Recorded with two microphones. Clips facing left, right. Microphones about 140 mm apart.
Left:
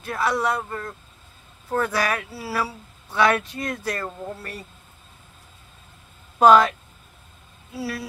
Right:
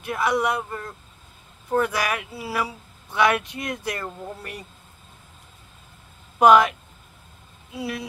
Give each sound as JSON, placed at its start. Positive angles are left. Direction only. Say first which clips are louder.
{"t": 0.0, "sound": "speech", "louder": "right 1 dB", "side_deg": -15}
{"t": 6.4, "sound": "speech", "louder": "left 1 dB", "side_deg": -15}